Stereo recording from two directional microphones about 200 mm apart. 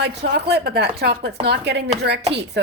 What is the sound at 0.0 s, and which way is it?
A woman's voice, 55° right (ahead or behind).